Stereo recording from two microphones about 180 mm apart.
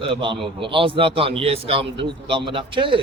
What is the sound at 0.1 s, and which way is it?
A man's voice, 30° right (ahead or behind).